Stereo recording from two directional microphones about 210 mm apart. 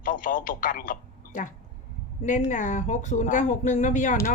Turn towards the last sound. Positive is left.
turn(degrees=35)  # may be behind; listen again after turning